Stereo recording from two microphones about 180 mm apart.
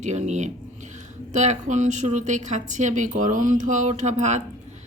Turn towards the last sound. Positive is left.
turn(degrees=-40)  # may be behind; listen again after turning